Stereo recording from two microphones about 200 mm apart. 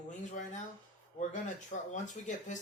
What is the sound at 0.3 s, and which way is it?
Speech, 40° left (ahead or behind).